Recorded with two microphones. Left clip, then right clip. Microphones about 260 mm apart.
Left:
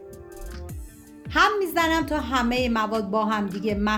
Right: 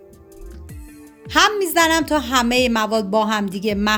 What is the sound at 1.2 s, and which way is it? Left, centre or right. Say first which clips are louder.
A woman's voice: right 4 dB; right.